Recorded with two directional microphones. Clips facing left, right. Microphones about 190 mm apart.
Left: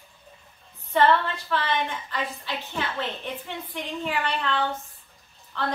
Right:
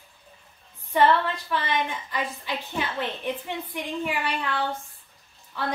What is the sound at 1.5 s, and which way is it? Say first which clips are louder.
A woman's voice: left 1 dB; 15° right (ahead or behind).